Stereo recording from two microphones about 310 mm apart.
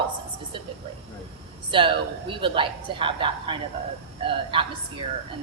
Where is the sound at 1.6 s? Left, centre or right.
Centre.